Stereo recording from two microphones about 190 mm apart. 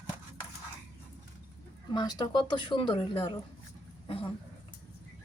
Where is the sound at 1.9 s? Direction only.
20° left (ahead or behind).